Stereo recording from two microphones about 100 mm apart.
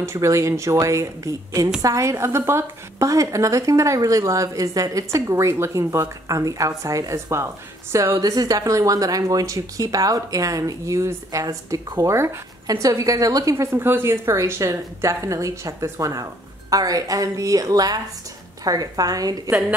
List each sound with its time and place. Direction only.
0.0 s a woman's voice: 30° right (ahead or behind)
8.2 s a woman's voice: 40° right (ahead or behind)
11.4 s a woman's voice: 40° right (ahead or behind)